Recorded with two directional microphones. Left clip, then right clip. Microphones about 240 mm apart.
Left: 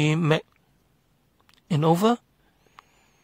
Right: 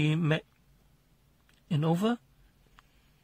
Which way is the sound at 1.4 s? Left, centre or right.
Left.